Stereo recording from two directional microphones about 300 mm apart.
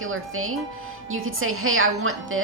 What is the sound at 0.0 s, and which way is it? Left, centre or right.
A woman's voice, right.